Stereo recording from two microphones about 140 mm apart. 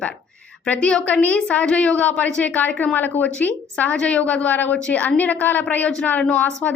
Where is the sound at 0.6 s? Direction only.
5° left (ahead or behind).